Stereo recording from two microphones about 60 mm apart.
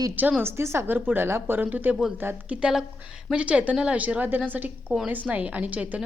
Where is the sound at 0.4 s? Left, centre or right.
Right.